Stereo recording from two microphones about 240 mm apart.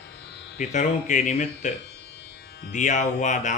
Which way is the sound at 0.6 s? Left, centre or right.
Left.